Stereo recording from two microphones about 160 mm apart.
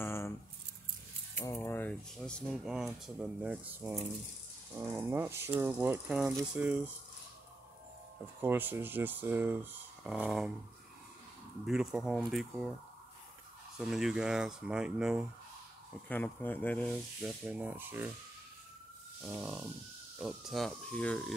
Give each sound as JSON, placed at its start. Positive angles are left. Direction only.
{"t": 0.0, "sound": "keys jangling", "side_deg": 15}
{"t": 1.3, "sound": "speech", "side_deg": 15}
{"t": 8.4, "sound": "speech", "side_deg": -10}
{"t": 11.6, "sound": "speech", "side_deg": -5}
{"t": 13.7, "sound": "speech", "side_deg": -5}
{"t": 16.1, "sound": "speech", "side_deg": 10}
{"t": 17.2, "sound": "speech", "side_deg": -5}
{"t": 19.2, "sound": "speech", "side_deg": -5}